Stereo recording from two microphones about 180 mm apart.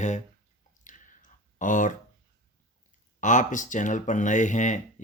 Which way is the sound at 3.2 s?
45° left (ahead or behind).